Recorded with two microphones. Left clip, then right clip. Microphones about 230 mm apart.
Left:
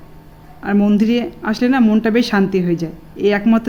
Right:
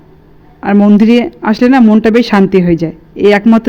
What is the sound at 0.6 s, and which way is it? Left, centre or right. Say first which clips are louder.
Speech: right 8 dB; right.